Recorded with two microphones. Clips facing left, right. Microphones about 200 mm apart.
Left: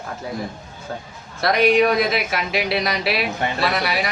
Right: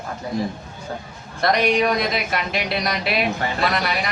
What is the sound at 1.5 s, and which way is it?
Speech, 5° left (ahead or behind).